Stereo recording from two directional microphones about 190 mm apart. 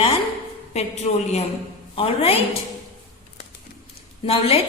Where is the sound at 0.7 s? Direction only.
35° left (ahead or behind).